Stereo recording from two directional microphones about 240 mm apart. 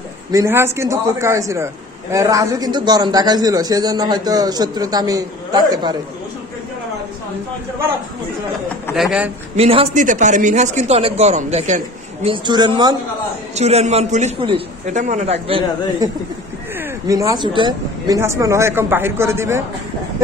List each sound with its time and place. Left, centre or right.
0.3 s a man's voice: centre
8.9 s speech: centre
9.6 s a man's voice: right
17.1 s a man's voice: centre